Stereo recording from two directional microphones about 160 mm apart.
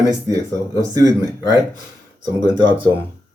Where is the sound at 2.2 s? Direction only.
25° right (ahead or behind).